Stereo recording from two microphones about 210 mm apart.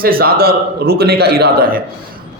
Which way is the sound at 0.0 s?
45° right (ahead or behind).